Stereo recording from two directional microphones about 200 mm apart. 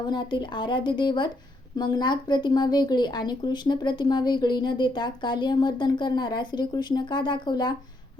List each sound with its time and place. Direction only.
0.0 s speech: 20° left (ahead or behind)